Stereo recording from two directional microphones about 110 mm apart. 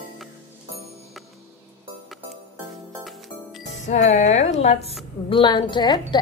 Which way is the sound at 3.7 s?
90° left.